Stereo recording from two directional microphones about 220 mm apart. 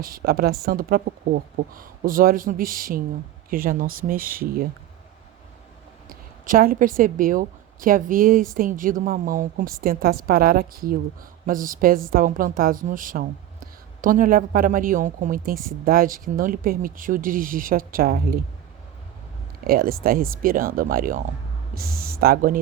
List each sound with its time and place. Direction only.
0.0 s a woman's voice: 45° right (ahead or behind)
6.1 s a woman's voice: 40° right (ahead or behind)
19.6 s a woman's voice: 40° right (ahead or behind)